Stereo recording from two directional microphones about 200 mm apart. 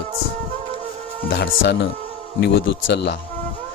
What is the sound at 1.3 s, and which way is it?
Speech, 60° left (ahead or behind).